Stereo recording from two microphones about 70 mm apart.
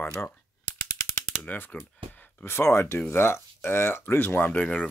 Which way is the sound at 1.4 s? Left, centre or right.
Left.